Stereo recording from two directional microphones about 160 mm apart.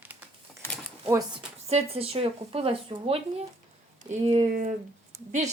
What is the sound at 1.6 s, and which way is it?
Speech, 40° right (ahead or behind).